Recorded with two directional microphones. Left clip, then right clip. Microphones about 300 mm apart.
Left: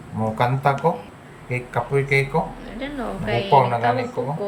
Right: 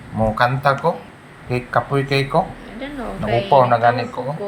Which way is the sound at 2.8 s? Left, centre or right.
Centre.